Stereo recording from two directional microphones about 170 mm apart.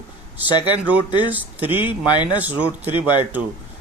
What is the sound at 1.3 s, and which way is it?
Speech, 10° right (ahead or behind).